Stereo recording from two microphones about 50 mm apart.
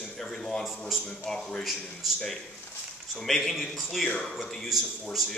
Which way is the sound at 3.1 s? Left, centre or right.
Centre.